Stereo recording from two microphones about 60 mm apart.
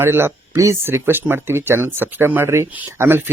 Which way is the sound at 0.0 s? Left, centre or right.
Right.